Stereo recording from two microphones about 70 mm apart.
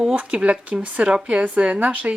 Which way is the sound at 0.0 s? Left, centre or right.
Centre.